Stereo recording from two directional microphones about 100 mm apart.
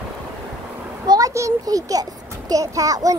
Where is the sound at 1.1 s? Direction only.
35° right (ahead or behind).